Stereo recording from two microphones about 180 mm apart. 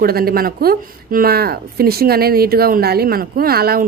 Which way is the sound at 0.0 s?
55° right (ahead or behind).